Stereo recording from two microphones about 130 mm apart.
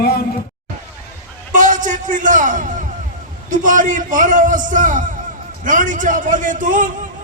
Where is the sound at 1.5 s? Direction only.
80° right.